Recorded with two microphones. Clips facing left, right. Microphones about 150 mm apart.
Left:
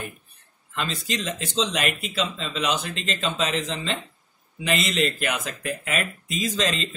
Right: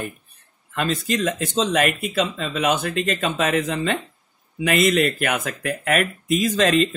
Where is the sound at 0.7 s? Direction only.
55° right (ahead or behind).